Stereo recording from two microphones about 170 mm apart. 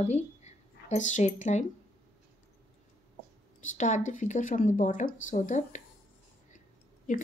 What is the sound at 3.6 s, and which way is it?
Speech, 45° left (ahead or behind).